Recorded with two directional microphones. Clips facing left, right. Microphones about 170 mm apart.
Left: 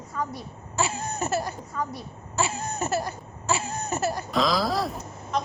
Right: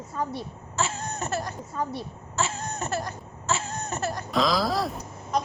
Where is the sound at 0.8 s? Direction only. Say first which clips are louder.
Left 2 dB; 10° left (ahead or behind).